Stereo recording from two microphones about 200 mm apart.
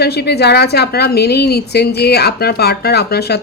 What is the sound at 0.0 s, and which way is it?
A woman's voice, 55° left (ahead or behind).